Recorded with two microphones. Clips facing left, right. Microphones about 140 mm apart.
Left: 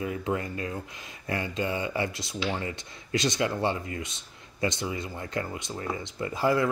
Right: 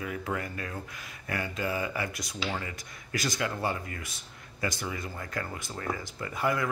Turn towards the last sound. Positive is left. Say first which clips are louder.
# left 5 dB
turn(degrees=30)  # may be behind; listen again after turning